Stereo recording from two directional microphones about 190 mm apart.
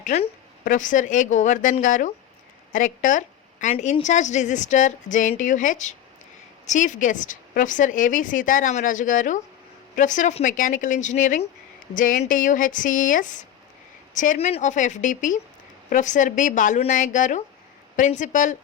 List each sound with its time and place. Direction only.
0.0 s a woman's voice: 40° left (ahead or behind)